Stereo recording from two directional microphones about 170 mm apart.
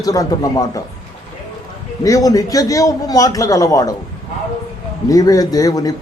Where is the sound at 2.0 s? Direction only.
20° left (ahead or behind).